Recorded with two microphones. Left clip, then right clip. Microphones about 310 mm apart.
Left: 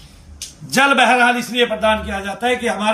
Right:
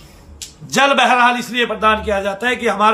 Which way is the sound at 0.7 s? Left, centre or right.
Centre.